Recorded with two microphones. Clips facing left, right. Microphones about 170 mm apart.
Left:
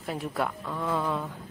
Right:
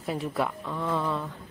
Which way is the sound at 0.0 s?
Centre (ahead or behind).